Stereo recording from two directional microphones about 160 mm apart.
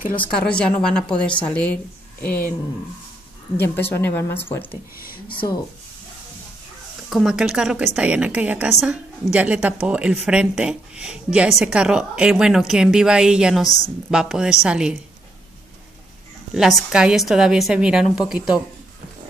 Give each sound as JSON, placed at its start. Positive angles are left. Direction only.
{"t": 0.4, "sound": "speech", "side_deg": 5}
{"t": 3.6, "sound": "speech", "side_deg": 15}
{"t": 5.0, "sound": "speech", "side_deg": 65}
{"t": 7.1, "sound": "a woman's voice", "side_deg": 0}
{"t": 16.5, "sound": "a woman's voice", "side_deg": 0}